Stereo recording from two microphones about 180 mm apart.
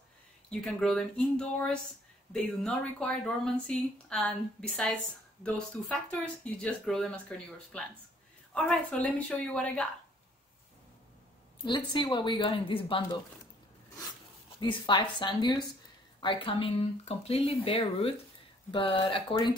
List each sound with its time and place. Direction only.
0.5 s a woman's voice: centre (ahead or behind)
11.6 s a woman's voice: 25° left (ahead or behind)
14.6 s a woman's voice: 25° left (ahead or behind)